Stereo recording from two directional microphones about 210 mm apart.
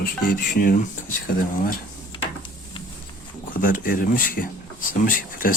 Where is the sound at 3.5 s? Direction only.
40° left (ahead or behind).